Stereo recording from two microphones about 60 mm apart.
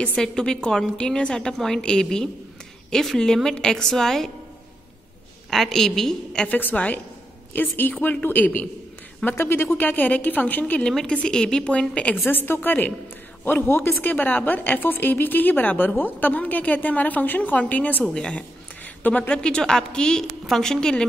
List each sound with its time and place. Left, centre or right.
0.0 s a woman's voice: centre
5.5 s a woman's voice: centre
6.5 s a woman's voice: left
9.4 s a woman's voice: left
12.3 s a woman's voice: left
18.0 s a woman's voice: centre